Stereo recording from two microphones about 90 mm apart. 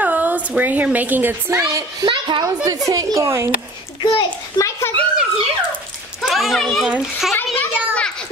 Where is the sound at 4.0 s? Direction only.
70° left (ahead or behind).